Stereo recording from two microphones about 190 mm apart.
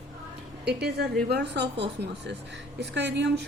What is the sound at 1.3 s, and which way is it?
A woman's voice, 60° right (ahead or behind).